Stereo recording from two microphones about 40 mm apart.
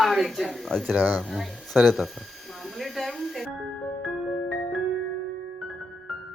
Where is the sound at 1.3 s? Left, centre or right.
Centre.